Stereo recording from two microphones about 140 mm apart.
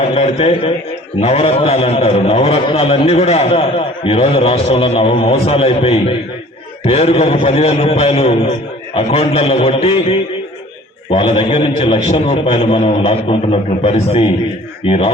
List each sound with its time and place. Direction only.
0.1 s a man's voice: 45° left (ahead or behind)